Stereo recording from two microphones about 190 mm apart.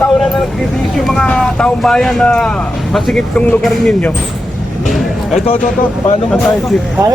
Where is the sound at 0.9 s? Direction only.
Centre (ahead or behind).